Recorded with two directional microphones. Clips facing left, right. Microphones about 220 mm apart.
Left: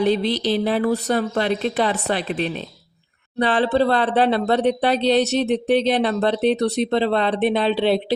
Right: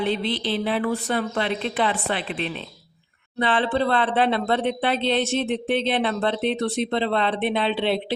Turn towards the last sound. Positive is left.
turn(degrees=40)  # may be behind; listen again after turning